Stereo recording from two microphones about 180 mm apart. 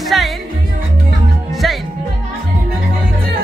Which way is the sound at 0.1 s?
Centre (ahead or behind).